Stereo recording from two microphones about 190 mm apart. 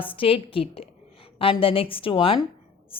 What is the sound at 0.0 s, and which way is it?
A woman's voice, 30° left (ahead or behind).